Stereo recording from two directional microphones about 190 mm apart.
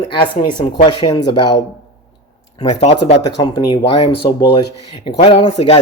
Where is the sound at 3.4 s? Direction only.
25° left (ahead or behind).